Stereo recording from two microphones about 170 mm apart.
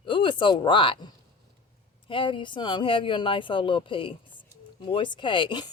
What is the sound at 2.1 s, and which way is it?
A woman's voice, 30° left (ahead or behind).